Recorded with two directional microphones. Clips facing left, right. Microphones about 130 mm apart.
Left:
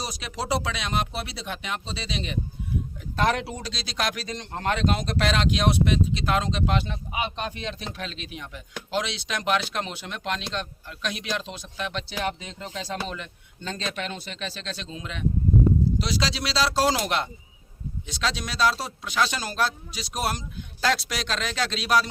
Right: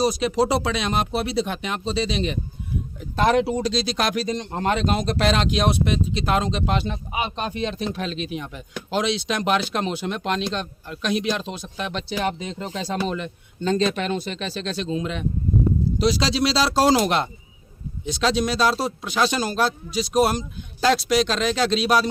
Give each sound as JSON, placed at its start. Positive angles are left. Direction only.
{"t": 0.2, "sound": "speech", "side_deg": -30}
{"t": 3.0, "sound": "speech", "side_deg": -20}
{"t": 16.3, "sound": "speech", "side_deg": -30}